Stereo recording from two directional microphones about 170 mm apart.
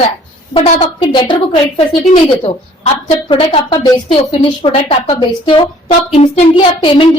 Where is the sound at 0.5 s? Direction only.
35° left (ahead or behind).